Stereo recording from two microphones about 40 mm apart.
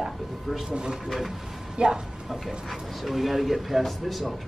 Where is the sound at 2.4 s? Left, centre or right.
Centre.